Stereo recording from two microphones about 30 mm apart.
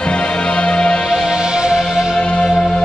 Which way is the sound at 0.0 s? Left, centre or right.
Left.